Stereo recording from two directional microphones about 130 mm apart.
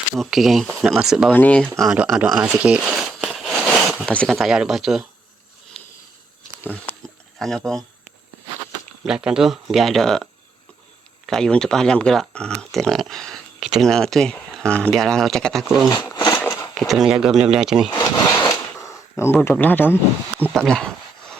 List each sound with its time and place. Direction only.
0.2 s speech: centre (ahead or behind)
1.3 s speech: 10° left (ahead or behind)
1.8 s speech: 5° right (ahead or behind)
5.7 s sniff: centre (ahead or behind)
6.6 s a sound: 15° left (ahead or behind)
7.3 s speech: 5° left (ahead or behind)
9.0 s speech: 5° right (ahead or behind)
11.3 s speech: 5° left (ahead or behind)
15.9 s a sound: 30° left (ahead or behind)
16.4 s a sound: 20° left (ahead or behind)
16.7 s speech: centre (ahead or behind)
18.8 s speech: 20° left (ahead or behind)
20.5 s a sound: 5° left (ahead or behind)